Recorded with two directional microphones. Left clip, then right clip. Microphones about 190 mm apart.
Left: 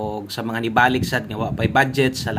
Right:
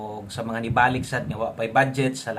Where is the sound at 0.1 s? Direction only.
30° left (ahead or behind).